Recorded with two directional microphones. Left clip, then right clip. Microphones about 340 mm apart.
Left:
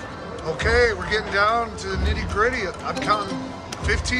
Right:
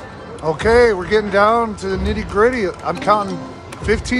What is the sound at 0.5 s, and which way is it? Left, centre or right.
Speech, centre.